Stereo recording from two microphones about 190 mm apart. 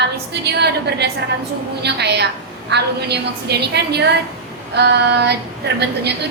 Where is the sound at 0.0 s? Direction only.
60° right (ahead or behind).